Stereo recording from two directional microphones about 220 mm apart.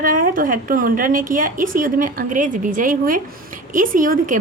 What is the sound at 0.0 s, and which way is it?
Speech, 40° right (ahead or behind).